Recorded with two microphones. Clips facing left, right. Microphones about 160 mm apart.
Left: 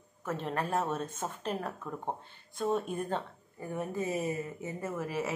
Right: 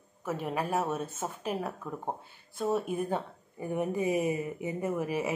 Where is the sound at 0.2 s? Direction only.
10° right (ahead or behind).